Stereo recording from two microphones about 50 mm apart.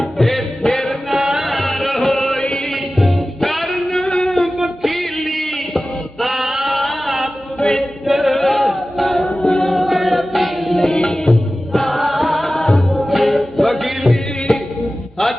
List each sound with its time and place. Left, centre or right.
0.2 s music: centre
1.1 s music: centre
1.5 s music: centre
2.4 s music: centre
2.6 s music: centre
3.9 s singing: centre
4.5 s a sound: centre
7.6 s music: centre
8.0 s music: centre
9.2 s music: centre
9.7 s music: centre
12.9 s music: centre